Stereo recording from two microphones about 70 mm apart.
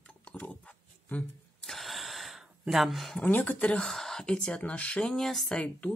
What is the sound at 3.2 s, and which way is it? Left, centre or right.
Speech, left.